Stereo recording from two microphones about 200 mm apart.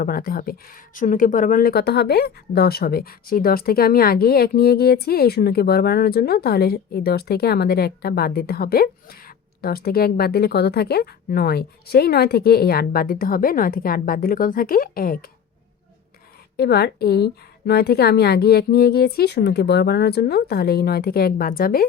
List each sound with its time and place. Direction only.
0.0 s speech: 45° left (ahead or behind)
16.6 s speech: 55° left (ahead or behind)